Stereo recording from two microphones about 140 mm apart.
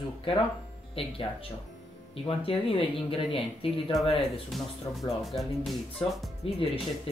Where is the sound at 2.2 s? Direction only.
40° left (ahead or behind).